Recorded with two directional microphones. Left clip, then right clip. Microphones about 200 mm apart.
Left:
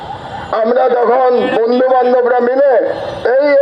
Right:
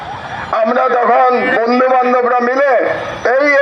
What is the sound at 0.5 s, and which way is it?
A man's voice, 35° left (ahead or behind).